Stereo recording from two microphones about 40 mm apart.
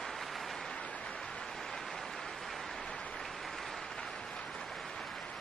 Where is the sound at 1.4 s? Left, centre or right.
Centre.